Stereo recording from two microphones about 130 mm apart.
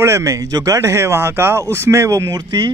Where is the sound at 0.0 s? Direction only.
25° right (ahead or behind).